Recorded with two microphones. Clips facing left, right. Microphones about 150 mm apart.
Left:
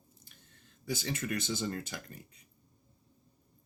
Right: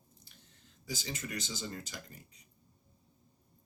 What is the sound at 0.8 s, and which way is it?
Speech, 55° left (ahead or behind).